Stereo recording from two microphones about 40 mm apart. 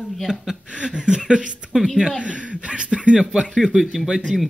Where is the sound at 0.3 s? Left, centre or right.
Centre.